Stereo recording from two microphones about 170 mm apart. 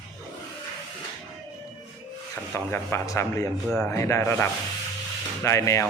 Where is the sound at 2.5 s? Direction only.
15° left (ahead or behind).